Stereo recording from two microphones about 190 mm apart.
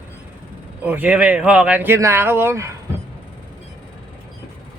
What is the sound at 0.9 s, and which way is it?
Speech, 10° right (ahead or behind).